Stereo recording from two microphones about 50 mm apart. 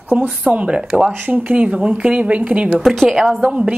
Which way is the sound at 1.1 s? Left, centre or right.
Right.